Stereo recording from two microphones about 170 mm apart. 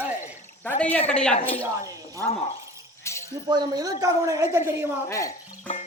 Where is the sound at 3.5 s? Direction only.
25° right (ahead or behind).